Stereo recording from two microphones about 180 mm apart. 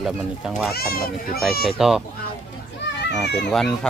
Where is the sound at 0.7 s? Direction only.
60° left (ahead or behind).